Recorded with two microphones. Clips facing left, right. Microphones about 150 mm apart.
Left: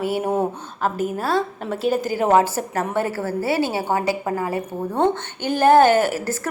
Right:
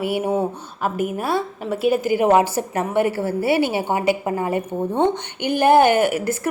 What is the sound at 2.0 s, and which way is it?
A woman's voice, 15° right (ahead or behind).